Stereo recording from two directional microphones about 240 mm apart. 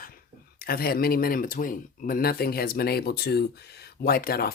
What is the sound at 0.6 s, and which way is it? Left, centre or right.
Speech, left.